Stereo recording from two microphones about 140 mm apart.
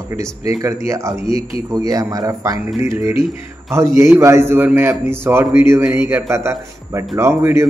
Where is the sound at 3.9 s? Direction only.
20° right (ahead or behind).